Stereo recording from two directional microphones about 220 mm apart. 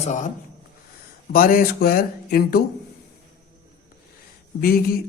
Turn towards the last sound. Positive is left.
turn(degrees=45)  # may be behind; listen again after turning